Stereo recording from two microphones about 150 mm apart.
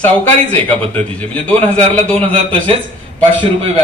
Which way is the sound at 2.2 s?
35° right (ahead or behind).